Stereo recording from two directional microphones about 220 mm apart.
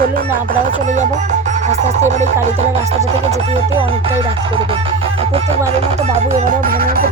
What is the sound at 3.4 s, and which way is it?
Music, 25° right (ahead or behind).